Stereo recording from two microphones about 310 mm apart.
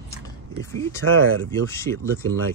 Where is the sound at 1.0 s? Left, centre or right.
Right.